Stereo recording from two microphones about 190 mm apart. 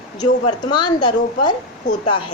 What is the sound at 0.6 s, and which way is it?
Speech, 25° left (ahead or behind).